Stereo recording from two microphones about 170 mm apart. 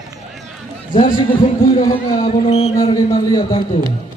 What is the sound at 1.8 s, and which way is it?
Speech, 25° left (ahead or behind).